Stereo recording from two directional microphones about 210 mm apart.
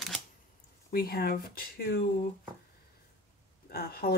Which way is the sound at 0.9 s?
45° left (ahead or behind).